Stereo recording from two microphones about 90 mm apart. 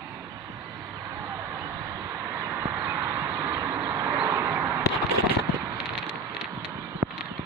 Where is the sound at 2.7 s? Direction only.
20° right (ahead or behind).